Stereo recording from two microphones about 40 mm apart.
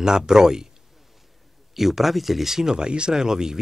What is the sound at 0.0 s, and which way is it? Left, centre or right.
Speech, centre.